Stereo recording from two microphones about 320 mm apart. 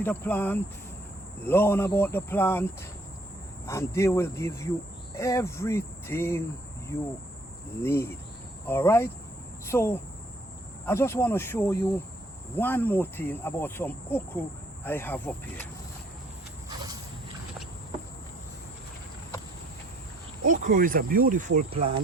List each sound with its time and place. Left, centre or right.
0.0 s speech: centre
1.5 s cricket: centre
3.7 s cricket: centre
7.8 s cricket: centre
16.6 s a sound: centre
20.4 s speech: right